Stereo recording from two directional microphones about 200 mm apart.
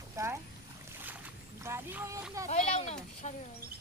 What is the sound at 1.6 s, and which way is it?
Speech, 15° right (ahead or behind).